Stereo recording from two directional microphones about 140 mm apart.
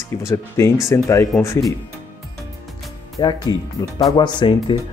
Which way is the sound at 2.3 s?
Centre (ahead or behind).